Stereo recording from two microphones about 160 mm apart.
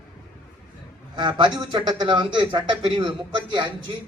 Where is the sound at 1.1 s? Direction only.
30° right (ahead or behind).